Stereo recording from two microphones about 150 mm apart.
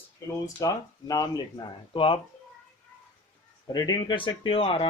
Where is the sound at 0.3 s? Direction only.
25° left (ahead or behind).